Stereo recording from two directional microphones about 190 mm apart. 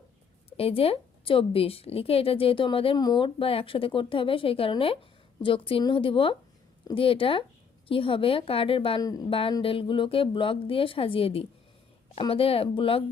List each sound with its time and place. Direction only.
0.5 s a woman's voice: 30° left (ahead or behind)